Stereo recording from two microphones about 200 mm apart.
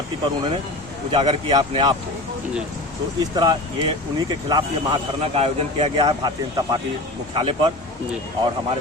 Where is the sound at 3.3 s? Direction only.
20° right (ahead or behind).